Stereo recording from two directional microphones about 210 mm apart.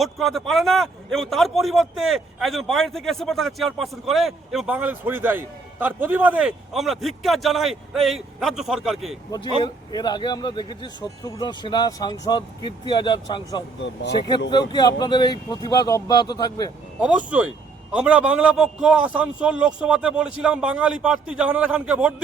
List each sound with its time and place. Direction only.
0.0 s a man's voice: centre (ahead or behind)
9.6 s speech: 20° left (ahead or behind)
13.7 s speech: 60° left (ahead or behind)
14.5 s speech: 20° left (ahead or behind)
17.0 s a man's voice: 5° right (ahead or behind)